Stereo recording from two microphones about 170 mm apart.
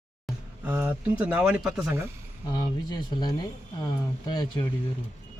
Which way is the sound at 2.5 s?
25° left (ahead or behind).